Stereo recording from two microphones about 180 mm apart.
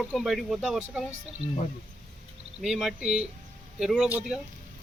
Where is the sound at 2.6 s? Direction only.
Centre (ahead or behind).